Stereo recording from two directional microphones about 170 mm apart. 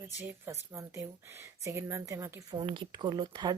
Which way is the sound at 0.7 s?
15° right (ahead or behind).